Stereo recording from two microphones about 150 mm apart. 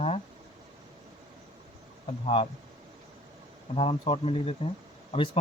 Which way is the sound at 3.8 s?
40° left (ahead or behind).